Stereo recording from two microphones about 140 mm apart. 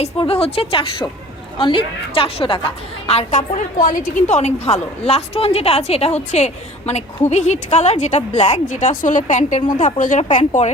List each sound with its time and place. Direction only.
0.0 s a woman's voice: 45° left (ahead or behind); by 10.7 s 60° left (ahead or behind)